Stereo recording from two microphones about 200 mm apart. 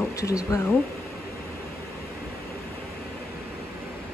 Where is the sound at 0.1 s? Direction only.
15° left (ahead or behind).